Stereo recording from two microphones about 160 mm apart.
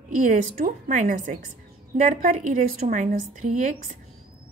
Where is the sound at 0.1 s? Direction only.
50° right (ahead or behind).